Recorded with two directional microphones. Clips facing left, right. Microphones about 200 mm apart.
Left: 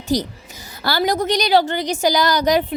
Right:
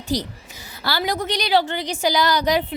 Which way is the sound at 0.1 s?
45° left (ahead or behind).